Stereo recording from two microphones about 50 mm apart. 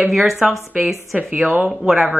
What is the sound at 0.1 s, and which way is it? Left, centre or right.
Speech, centre.